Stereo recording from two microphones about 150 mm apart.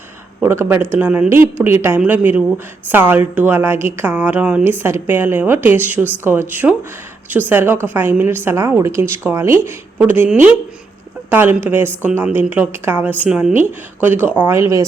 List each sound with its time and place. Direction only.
0.4 s speech: 15° right (ahead or behind)